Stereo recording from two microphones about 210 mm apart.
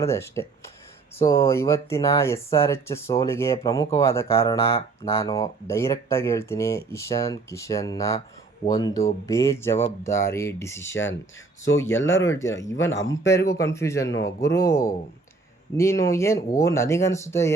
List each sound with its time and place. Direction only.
0.0 s speech: 15° left (ahead or behind)
12.7 s speech: 60° left (ahead or behind)
13.7 s speech: 15° left (ahead or behind)
14.1 s speech: 55° left (ahead or behind)
15.8 s speech: 15° left (ahead or behind)